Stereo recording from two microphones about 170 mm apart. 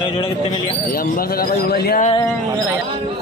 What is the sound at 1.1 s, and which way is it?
Speech, 60° left (ahead or behind).